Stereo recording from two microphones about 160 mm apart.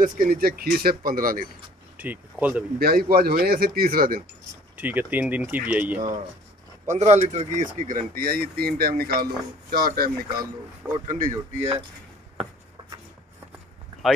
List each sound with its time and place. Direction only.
0.0 s speech: 65° right (ahead or behind)
2.0 s speech: 10° right (ahead or behind)
2.8 s speech: 70° right (ahead or behind)
4.7 s speech: 10° right (ahead or behind)
6.9 s speech: 45° right (ahead or behind); by 10.1 s 70° right (ahead or behind)
10.3 s speech: 25° right (ahead or behind)
11.1 s speech: 55° right (ahead or behind)